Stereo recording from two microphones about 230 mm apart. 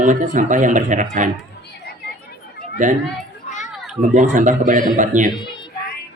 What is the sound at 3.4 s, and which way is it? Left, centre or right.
Children playing, left.